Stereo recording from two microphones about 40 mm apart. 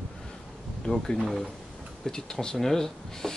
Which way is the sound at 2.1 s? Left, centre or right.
Centre.